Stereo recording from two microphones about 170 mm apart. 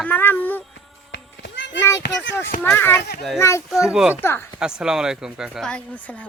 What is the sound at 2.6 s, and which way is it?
Speech, 10° left (ahead or behind).